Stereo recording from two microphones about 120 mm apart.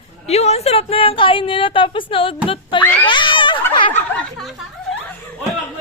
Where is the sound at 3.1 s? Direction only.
45° left (ahead or behind).